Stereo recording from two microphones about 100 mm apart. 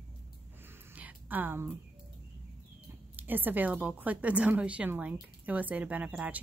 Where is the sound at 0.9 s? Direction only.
15° right (ahead or behind).